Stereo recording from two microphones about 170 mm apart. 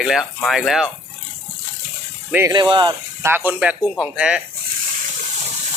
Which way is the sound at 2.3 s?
15° right (ahead or behind).